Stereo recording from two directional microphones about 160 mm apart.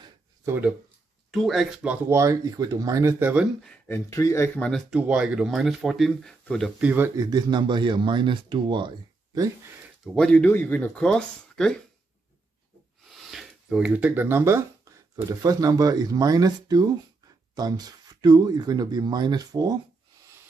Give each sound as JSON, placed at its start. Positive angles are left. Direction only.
{"t": 0.5, "sound": "speech", "side_deg": -10}
{"t": 1.3, "sound": "speech", "side_deg": 0}
{"t": 3.6, "sound": "speech", "side_deg": 10}
{"t": 4.6, "sound": "speech", "side_deg": 5}
{"t": 6.8, "sound": "speech", "side_deg": -10}
{"t": 7.2, "sound": "speech", "side_deg": -25}
{"t": 10.1, "sound": "speech", "side_deg": 5}
{"t": 13.1, "sound": "speech", "side_deg": 0}